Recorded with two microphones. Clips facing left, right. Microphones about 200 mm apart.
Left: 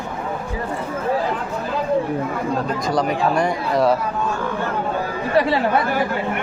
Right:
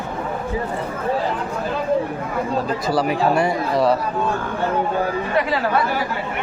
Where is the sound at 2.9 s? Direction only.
5° right (ahead or behind).